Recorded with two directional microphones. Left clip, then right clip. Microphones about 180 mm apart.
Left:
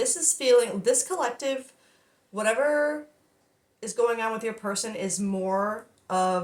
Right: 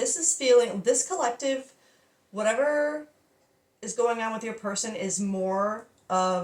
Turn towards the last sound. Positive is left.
turn(degrees=35)  # may be behind; listen again after turning